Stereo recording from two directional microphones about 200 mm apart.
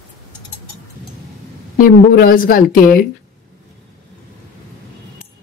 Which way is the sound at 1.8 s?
45° left (ahead or behind).